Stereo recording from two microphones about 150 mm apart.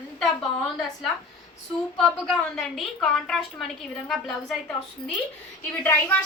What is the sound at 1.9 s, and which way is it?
A woman's voice, centre (ahead or behind).